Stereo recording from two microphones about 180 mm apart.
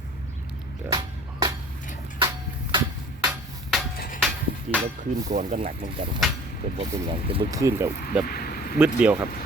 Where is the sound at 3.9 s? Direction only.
55° left (ahead or behind).